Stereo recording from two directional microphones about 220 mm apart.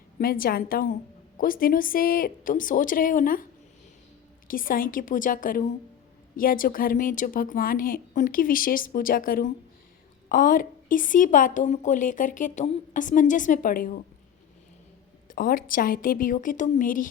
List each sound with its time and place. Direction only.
0.2 s a woman's voice: 40° left (ahead or behind)
4.4 s a woman's voice: 40° left (ahead or behind)
15.3 s a woman's voice: 40° left (ahead or behind)